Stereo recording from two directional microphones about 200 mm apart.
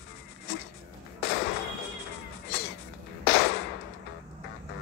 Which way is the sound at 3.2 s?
55° left (ahead or behind).